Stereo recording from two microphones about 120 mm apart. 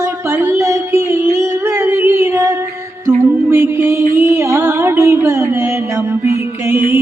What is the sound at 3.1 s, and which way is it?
Music, 20° right (ahead or behind).